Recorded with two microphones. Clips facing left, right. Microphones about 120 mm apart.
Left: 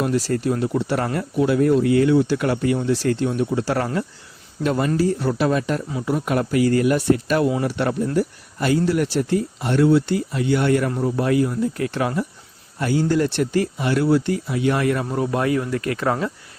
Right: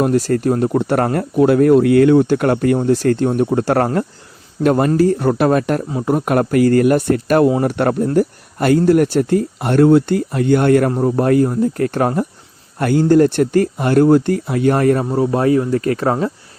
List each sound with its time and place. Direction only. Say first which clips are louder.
0.0 s speech: right 6 dB; 50° right (ahead or behind)
15.0 s speech: right 6 dB; 30° right (ahead or behind)